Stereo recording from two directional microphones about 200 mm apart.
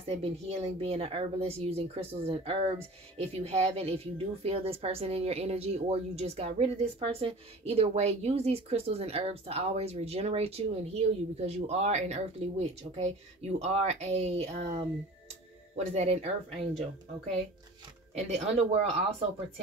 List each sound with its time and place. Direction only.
0.0 s a woman's voice: 30° right (ahead or behind)
18.1 s a woman's voice: 30° right (ahead or behind)